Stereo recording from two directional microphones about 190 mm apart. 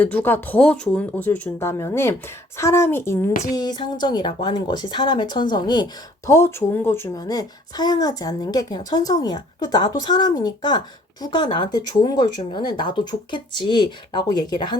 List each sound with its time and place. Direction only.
0.0 s speech: 10° left (ahead or behind)